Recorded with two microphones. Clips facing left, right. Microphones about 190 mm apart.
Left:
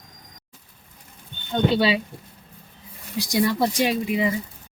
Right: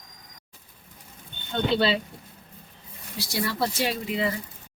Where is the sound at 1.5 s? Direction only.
10° left (ahead or behind).